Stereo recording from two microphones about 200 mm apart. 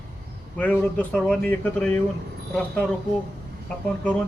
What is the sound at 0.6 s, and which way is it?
Speech, 5° left (ahead or behind).